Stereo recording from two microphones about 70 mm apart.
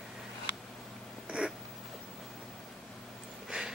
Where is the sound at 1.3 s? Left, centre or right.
Centre.